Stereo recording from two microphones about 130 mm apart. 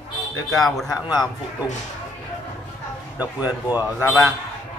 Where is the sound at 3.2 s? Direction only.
10° right (ahead or behind).